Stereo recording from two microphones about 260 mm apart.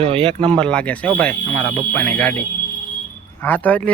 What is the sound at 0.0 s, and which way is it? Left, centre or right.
Speech, right.